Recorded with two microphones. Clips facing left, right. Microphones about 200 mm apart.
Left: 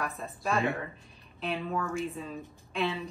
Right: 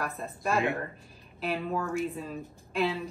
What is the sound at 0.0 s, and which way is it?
Speech, centre (ahead or behind).